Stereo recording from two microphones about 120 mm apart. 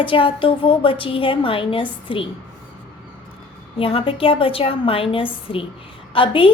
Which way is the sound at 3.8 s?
50° left (ahead or behind).